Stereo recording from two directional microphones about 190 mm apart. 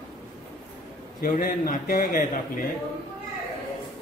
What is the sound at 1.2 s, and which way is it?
A man's voice, 45° left (ahead or behind).